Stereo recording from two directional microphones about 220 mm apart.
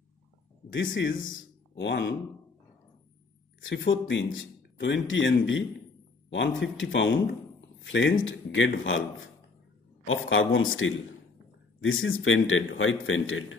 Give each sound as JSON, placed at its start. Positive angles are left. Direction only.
{"t": 0.7, "sound": "a man's voice", "side_deg": 55}
{"t": 3.6, "sound": "a man's voice", "side_deg": 55}